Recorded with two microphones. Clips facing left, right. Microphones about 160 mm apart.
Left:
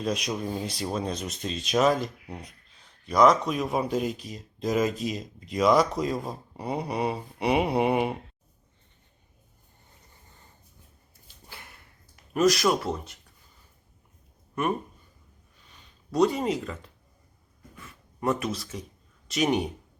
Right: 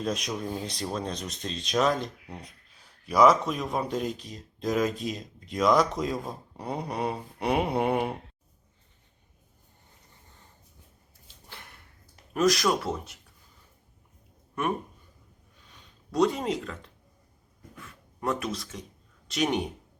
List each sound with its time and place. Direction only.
0.0 s speech: centre (ahead or behind)
11.4 s a sound: 5° left (ahead or behind)
12.3 s speech: centre (ahead or behind)
15.7 s speech: centre (ahead or behind)
17.7 s a sound: 5° left (ahead or behind)
19.3 s speech: centre (ahead or behind)